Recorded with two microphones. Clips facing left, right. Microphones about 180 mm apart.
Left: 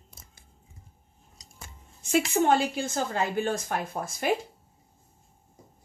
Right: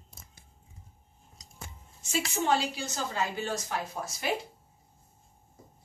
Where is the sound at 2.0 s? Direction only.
60° left (ahead or behind).